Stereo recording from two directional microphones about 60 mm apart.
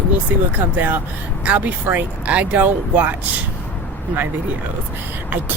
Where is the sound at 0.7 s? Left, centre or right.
Right.